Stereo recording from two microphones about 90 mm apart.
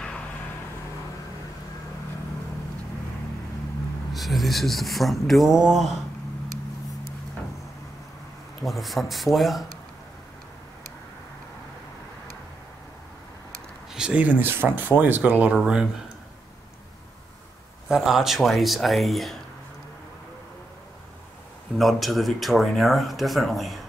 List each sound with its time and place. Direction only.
4.1 s speech: centre (ahead or behind)
8.6 s speech: centre (ahead or behind)
13.9 s speech: 10° right (ahead or behind)
17.8 s speech: 5° right (ahead or behind)
21.7 s speech: centre (ahead or behind)